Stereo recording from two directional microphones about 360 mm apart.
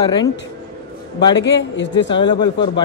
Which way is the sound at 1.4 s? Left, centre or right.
Left.